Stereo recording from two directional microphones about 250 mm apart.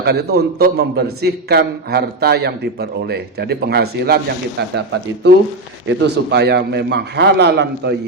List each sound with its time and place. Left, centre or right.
0.0 s a man's voice: right